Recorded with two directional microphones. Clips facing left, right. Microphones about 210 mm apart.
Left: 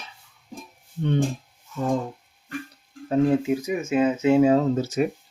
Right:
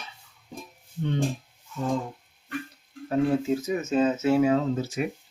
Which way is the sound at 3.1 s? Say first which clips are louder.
Left 3 dB; 15° left (ahead or behind).